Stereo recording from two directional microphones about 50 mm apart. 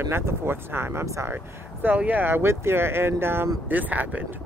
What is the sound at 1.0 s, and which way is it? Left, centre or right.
Speech, right.